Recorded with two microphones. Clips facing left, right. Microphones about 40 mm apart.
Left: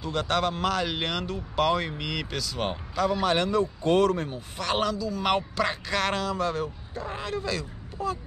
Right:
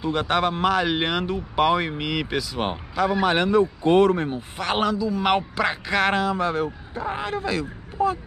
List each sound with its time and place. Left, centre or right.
0.0 s speech: right